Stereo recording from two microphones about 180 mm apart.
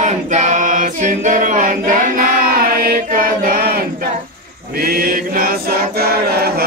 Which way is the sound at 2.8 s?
55° right (ahead or behind).